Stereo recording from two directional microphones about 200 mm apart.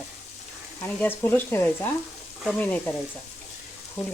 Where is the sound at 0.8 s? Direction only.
10° left (ahead or behind).